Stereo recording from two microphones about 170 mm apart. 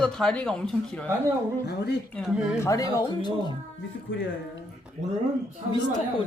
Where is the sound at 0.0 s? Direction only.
5° left (ahead or behind).